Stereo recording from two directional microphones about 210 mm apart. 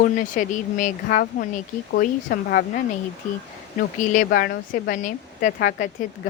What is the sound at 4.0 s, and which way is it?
Speech, 40° left (ahead or behind).